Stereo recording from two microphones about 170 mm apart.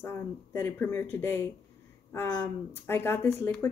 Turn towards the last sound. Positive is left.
turn(degrees=15)  # may be behind; listen again after turning